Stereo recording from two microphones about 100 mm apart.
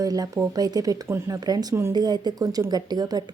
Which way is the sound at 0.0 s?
40° right (ahead or behind).